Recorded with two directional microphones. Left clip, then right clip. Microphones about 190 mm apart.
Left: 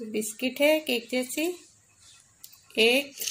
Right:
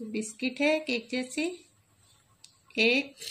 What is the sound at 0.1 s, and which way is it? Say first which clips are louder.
Speech: left 3 dB; 65° left (ahead or behind).